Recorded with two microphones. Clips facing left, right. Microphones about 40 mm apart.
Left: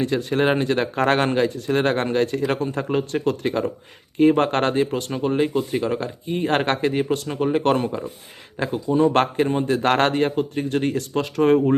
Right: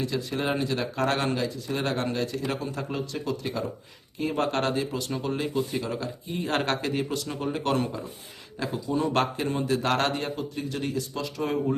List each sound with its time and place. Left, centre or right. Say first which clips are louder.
0.0 s speech: left 8 dB; left
5.1 s speech: left 7 dB; left
9.8 s speech: left 7 dB; left